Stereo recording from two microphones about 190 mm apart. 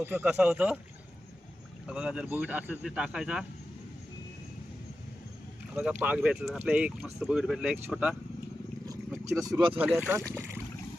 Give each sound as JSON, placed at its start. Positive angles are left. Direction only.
{"t": 0.0, "sound": "speech", "side_deg": -10}
{"t": 1.9, "sound": "speech", "side_deg": -5}
{"t": 5.7, "sound": "speech", "side_deg": -10}
{"t": 9.4, "sound": "speech", "side_deg": -20}
{"t": 9.7, "sound": "speech", "side_deg": -10}